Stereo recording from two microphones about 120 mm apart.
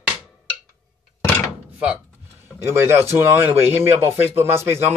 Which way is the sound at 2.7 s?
20° right (ahead or behind).